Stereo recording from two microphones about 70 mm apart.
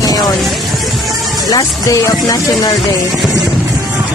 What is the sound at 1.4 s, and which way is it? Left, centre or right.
Speech, left.